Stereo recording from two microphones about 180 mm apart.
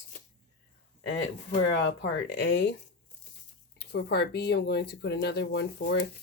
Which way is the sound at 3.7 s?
65° left (ahead or behind).